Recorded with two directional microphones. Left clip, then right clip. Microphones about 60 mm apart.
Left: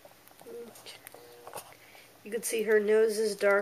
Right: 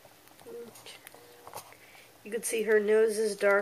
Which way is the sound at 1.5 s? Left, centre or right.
Centre.